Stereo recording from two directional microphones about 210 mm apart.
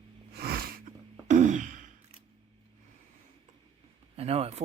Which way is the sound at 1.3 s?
35° right (ahead or behind).